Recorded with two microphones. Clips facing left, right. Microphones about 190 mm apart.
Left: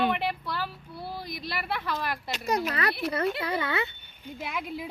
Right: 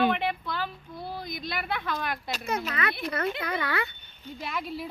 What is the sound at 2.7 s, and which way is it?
Speech, 35° left (ahead or behind).